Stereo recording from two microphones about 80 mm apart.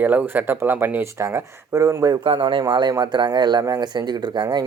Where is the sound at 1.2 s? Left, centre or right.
Right.